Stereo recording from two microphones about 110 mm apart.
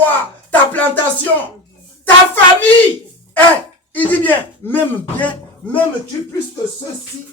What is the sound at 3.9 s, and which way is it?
Speech, 15° left (ahead or behind).